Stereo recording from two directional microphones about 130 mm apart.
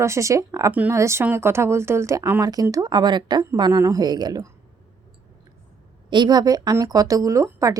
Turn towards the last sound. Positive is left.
turn(degrees=-25)  # may be behind; listen again after turning